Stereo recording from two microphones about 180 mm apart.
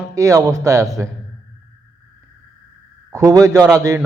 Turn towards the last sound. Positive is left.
turn(degrees=-20)  # may be behind; listen again after turning